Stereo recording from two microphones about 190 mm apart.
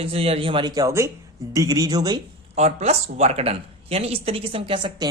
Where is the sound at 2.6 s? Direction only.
35° right (ahead or behind).